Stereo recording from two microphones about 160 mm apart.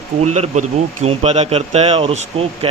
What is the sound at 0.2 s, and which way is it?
Speech, 45° right (ahead or behind).